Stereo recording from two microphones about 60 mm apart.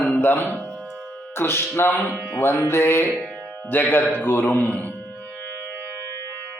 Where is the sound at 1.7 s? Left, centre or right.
Left.